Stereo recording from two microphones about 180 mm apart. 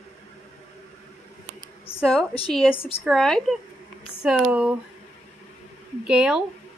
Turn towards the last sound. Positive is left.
turn(degrees=-5)  # may be behind; listen again after turning